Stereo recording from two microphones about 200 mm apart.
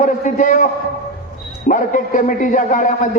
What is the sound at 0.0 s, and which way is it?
A man's voice, 40° left (ahead or behind).